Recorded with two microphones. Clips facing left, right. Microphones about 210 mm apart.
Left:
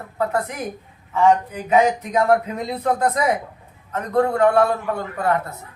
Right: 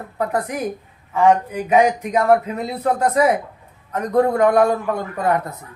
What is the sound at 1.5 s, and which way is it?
A man's voice, 10° right (ahead or behind).